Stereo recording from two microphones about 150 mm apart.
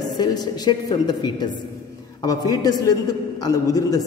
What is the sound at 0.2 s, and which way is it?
A man's voice, 25° left (ahead or behind).